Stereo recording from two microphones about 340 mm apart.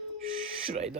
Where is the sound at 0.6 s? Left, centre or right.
Centre.